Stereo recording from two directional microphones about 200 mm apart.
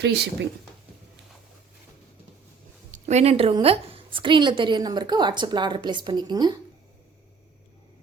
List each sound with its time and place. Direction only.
0.0 s speech: 55° right (ahead or behind)
2.9 s a woman's voice: 35° right (ahead or behind)